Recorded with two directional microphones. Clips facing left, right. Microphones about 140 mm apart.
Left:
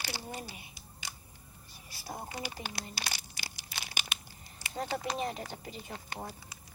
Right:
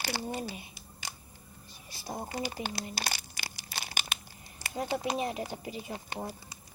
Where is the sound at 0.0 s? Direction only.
55° right (ahead or behind).